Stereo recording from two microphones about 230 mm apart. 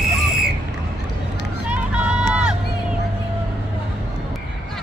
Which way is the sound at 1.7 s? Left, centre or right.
Centre.